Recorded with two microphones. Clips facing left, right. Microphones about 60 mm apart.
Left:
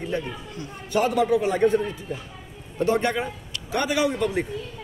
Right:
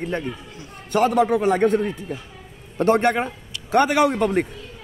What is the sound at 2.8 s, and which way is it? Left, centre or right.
A man's voice, right.